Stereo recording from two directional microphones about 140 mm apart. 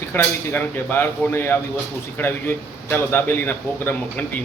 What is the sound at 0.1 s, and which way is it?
A man's voice, 15° left (ahead or behind).